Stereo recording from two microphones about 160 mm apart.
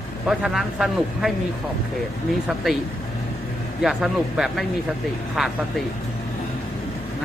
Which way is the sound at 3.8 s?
Centre (ahead or behind).